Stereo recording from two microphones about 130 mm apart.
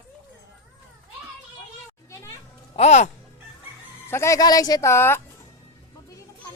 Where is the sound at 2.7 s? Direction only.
60° left (ahead or behind).